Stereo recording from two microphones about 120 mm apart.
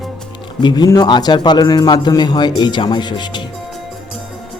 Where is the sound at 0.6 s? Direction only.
35° left (ahead or behind).